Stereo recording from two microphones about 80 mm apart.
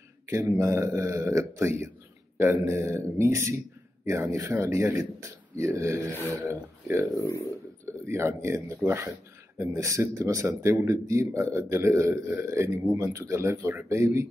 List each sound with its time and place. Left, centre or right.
0.3 s a man's voice: right